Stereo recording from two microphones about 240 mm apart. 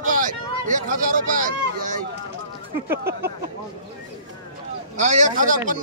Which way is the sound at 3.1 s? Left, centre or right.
Right.